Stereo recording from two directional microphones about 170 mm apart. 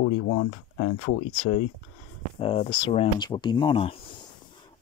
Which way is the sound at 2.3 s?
35° left (ahead or behind).